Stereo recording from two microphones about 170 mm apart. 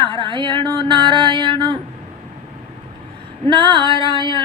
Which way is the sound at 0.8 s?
30° right (ahead or behind).